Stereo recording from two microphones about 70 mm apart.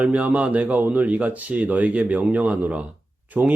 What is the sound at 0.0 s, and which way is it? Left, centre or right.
Speech, right.